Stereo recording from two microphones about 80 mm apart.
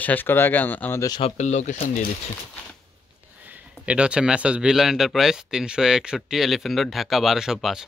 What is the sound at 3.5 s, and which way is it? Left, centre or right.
Speech, centre.